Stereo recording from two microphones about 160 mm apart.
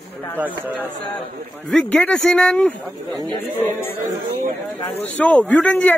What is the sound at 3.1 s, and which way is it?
Speech, 25° right (ahead or behind).